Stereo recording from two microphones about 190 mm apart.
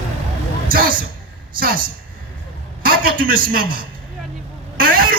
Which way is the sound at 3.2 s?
50° right (ahead or behind).